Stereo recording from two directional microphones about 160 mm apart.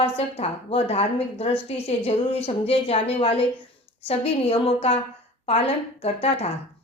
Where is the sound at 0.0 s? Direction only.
40° left (ahead or behind).